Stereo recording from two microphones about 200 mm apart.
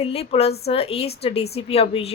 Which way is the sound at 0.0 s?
30° left (ahead or behind).